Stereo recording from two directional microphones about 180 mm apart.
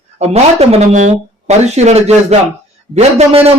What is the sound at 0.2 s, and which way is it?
A man's voice, 35° right (ahead or behind).